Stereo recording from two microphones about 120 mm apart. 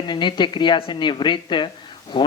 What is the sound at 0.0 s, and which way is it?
Speech, 40° left (ahead or behind).